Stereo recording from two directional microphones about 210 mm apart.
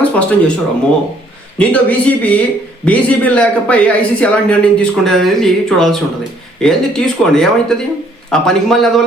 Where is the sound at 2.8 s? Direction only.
5° left (ahead or behind).